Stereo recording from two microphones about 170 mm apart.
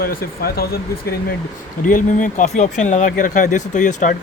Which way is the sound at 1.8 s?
50° left (ahead or behind).